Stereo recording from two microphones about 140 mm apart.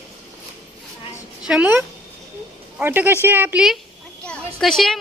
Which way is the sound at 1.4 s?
5° right (ahead or behind).